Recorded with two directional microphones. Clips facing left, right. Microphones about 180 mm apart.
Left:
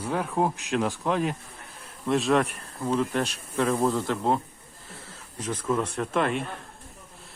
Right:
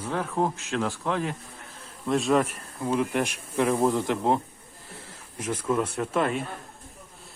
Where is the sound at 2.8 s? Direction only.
15° right (ahead or behind).